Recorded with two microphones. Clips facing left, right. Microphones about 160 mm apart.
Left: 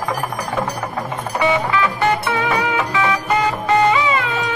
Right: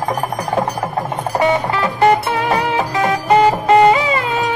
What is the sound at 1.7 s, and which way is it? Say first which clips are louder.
Music: right 4 dB; 35° right (ahead or behind).